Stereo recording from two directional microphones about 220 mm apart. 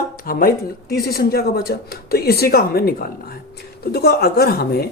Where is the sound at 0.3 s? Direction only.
40° left (ahead or behind).